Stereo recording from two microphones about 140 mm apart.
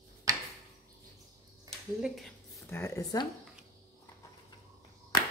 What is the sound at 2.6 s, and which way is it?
Speech, 20° left (ahead or behind).